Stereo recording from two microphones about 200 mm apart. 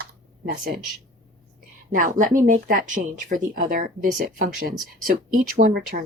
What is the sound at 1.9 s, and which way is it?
Speech, 40° right (ahead or behind).